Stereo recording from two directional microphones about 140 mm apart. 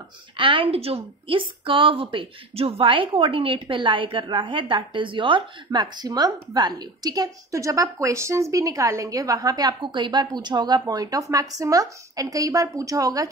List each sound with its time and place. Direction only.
0.4 s a woman's voice: 40° right (ahead or behind)